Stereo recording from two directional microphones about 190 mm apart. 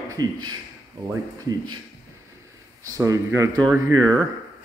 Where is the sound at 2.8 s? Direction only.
15° right (ahead or behind).